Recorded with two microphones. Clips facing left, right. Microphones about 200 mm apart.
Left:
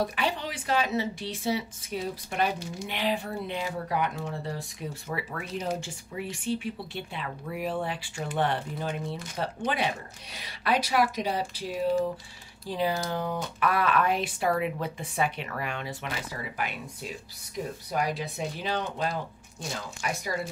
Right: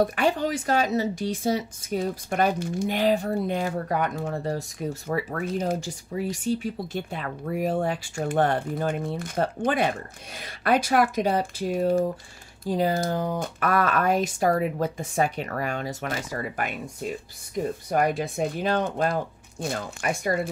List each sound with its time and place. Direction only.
0.0 s a woman's voice: 50° right (ahead or behind)